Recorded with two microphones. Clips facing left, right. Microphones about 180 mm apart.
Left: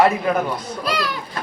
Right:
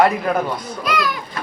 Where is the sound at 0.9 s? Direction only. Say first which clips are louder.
Right 3 dB; 30° left (ahead or behind).